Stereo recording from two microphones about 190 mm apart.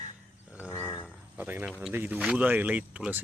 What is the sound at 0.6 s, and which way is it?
Livestock, 15° left (ahead or behind).